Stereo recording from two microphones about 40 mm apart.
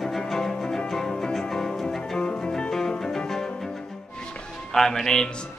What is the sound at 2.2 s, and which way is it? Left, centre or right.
Music, left.